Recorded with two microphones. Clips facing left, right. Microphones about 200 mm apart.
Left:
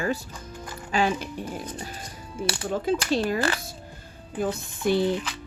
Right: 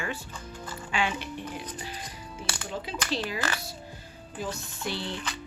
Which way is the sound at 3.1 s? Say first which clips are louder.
Left 7 dB; 50° left (ahead or behind).